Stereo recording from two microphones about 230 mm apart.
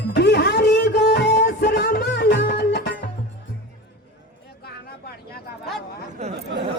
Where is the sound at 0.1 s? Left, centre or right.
Left.